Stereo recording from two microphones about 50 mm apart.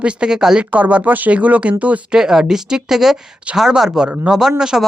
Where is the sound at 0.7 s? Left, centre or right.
Right.